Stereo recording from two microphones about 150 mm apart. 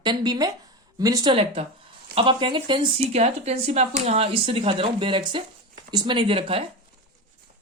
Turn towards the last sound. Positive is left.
turn(degrees=-35)  # may be behind; listen again after turning